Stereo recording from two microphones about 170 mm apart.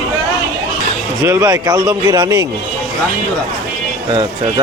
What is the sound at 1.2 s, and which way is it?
Speech, 15° right (ahead or behind).